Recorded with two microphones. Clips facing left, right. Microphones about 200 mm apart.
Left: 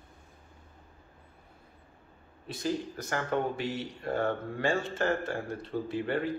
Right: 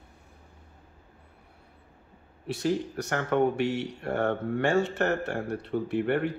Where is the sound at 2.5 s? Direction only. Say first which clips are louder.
Right 5 dB; 70° right (ahead or behind).